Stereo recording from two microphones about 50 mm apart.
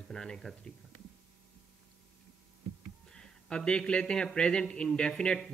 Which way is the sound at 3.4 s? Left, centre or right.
Centre.